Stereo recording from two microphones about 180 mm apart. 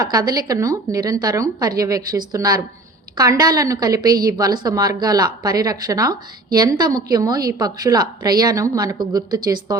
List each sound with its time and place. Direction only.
0.0 s a woman's voice: 20° right (ahead or behind)